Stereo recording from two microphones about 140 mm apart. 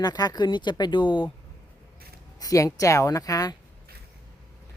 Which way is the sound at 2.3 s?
25° left (ahead or behind).